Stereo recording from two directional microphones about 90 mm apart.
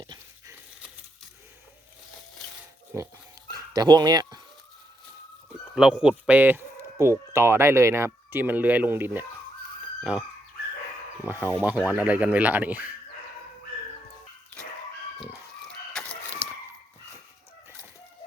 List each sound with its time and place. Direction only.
2.9 s dog: 30° right (ahead or behind)
3.5 s dog: 50° right (ahead or behind)
5.7 s speech: 10° right (ahead or behind)
10.0 s chicken: 15° right (ahead or behind)
11.3 s speech: 20° right (ahead or behind)
15.2 s chicken: 5° left (ahead or behind)
16.4 s a sound: 90° right